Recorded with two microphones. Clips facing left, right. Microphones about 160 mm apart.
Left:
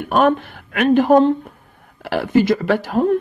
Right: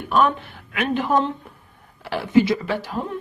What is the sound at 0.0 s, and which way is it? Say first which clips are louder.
Speech: left 4 dB; 60° left (ahead or behind).